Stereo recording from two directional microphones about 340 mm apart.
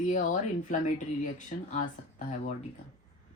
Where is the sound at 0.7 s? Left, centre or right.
Left.